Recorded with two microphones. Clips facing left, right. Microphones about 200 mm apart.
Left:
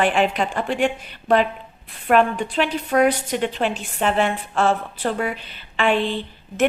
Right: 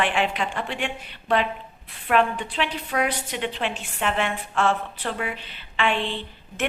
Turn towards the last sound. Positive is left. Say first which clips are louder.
# left 6 dB
turn(degrees=40)  # may be behind; listen again after turning